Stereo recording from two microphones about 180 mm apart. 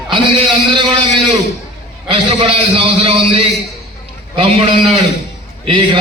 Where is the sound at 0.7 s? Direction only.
25° right (ahead or behind).